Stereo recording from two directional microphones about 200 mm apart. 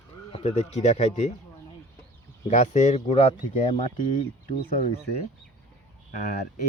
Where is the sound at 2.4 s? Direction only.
35° left (ahead or behind).